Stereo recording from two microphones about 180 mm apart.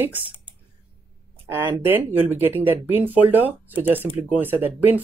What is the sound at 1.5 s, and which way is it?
Speech, 10° right (ahead or behind).